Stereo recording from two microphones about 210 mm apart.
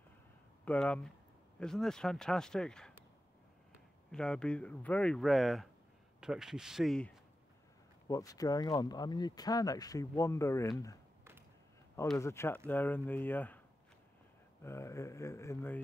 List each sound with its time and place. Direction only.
0.7 s speech: 5° left (ahead or behind)
4.1 s speech: 5° left (ahead or behind)
8.1 s speech: 15° left (ahead or behind)
12.2 s speech: 10° left (ahead or behind)
14.6 s speech: 10° left (ahead or behind)